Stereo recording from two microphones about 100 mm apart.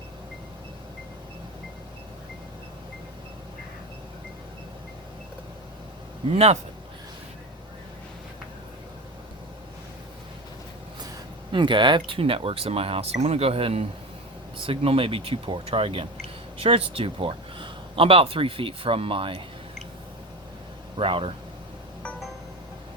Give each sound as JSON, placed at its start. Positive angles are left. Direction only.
{"t": 6.3, "sound": "a man's voice", "side_deg": -90}
{"t": 11.5, "sound": "speech", "side_deg": -55}
{"t": 21.0, "sound": "speech", "side_deg": -60}